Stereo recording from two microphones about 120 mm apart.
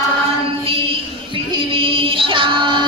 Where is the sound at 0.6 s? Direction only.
45° right (ahead or behind).